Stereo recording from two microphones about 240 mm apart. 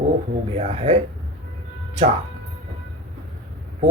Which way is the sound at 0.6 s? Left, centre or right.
Right.